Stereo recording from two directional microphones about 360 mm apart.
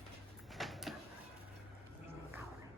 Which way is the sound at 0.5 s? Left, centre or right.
Centre.